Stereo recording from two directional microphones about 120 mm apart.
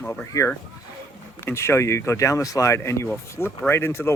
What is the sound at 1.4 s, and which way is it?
Speech, 20° left (ahead or behind).